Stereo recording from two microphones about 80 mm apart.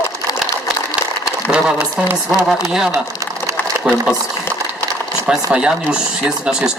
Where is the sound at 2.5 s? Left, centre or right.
Centre.